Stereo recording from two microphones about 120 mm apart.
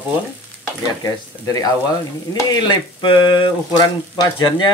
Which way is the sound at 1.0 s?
30° left (ahead or behind).